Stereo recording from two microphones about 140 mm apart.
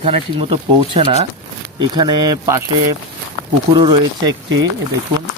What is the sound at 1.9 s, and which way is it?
Speech, 30° right (ahead or behind).